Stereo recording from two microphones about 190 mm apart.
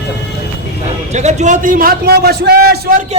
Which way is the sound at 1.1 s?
40° right (ahead or behind).